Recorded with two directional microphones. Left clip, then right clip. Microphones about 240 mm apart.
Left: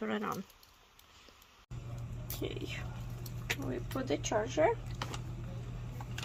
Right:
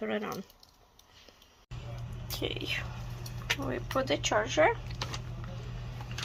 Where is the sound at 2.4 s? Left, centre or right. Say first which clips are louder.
Right 7 dB; centre.